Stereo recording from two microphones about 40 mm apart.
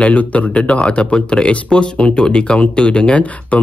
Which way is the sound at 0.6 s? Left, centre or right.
Left.